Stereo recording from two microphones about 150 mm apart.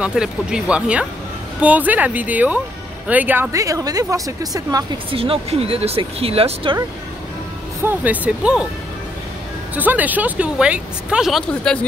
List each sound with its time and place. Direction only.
0.0 s speech: 5° right (ahead or behind); by 4.8 s 25° right (ahead or behind)
5.1 s speech: 40° right (ahead or behind)
7.8 s speech: 10° right (ahead or behind)
9.8 s speech: 10° right (ahead or behind); by 11.8 s 5° left (ahead or behind)